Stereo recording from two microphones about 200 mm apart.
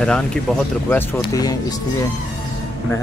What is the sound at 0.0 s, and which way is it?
Speech, 5° left (ahead or behind).